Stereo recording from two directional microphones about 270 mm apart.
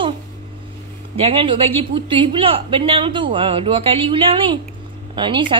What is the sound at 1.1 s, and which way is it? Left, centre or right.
A woman's voice, right.